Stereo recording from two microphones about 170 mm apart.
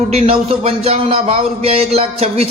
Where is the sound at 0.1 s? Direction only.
35° right (ahead or behind).